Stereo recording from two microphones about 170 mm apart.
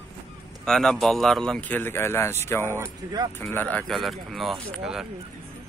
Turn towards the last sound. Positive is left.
turn(degrees=0)  # may be behind; listen again after turning